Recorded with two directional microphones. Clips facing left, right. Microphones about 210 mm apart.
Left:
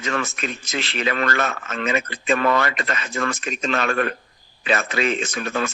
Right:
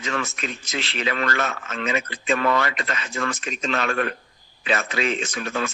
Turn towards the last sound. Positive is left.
turn(degrees=50)  # may be behind; listen again after turning